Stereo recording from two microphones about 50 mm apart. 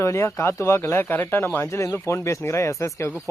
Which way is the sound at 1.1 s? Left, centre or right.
Left.